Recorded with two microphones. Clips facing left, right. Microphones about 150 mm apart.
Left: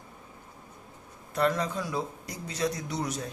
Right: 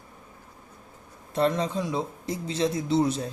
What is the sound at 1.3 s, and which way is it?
Speech, 25° right (ahead or behind).